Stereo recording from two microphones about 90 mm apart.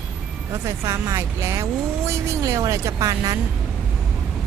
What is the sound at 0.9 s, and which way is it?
Speech, 30° right (ahead or behind).